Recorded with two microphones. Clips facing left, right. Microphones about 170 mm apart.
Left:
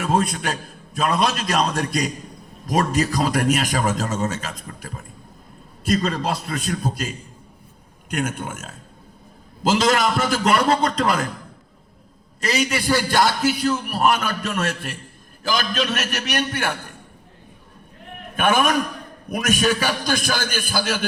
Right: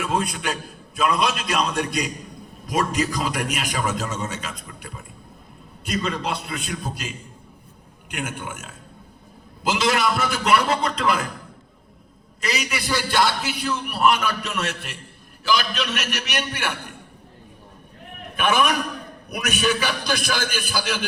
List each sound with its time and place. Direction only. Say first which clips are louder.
0.0 s a man's voice: left 3 dB; 40° left (ahead or behind)
12.4 s a man's voice: left 5 dB; 40° left (ahead or behind)
18.3 s a man's voice: left 2 dB; 50° left (ahead or behind)